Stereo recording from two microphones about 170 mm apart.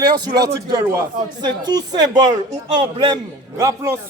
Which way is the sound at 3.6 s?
20° right (ahead or behind).